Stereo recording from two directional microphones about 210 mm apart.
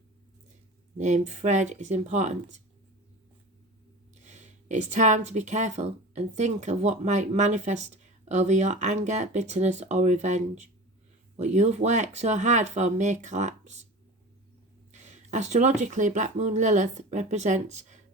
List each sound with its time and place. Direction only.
0.9 s speech: 35° right (ahead or behind)
4.2 s speech: 35° right (ahead or behind)
14.9 s speech: 35° right (ahead or behind)